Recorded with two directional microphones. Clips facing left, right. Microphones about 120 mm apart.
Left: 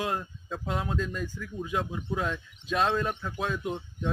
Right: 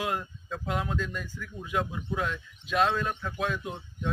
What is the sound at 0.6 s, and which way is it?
Speech, 30° left (ahead or behind).